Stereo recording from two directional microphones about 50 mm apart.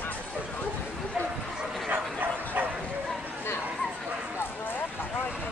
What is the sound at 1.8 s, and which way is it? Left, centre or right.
Bow-wow, right.